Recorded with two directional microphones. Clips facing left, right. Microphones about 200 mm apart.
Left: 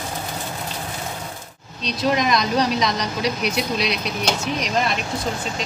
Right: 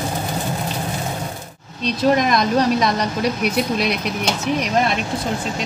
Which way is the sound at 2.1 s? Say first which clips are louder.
Right 2 dB; 50° right (ahead or behind).